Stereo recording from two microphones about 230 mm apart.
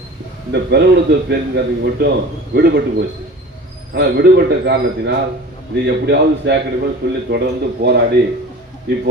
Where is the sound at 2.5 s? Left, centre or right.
Right.